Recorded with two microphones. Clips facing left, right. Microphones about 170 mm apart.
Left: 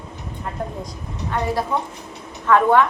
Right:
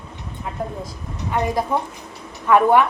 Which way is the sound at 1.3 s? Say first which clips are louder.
Right 1 dB; 15° right (ahead or behind).